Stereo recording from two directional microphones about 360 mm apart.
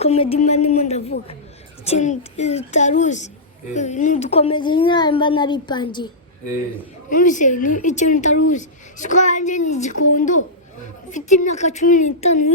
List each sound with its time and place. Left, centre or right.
0.0 s a woman's voice: centre